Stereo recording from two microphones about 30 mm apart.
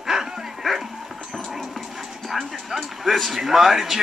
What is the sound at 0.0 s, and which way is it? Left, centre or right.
Dog, centre.